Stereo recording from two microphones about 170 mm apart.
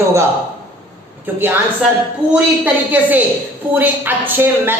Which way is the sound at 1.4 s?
10° right (ahead or behind).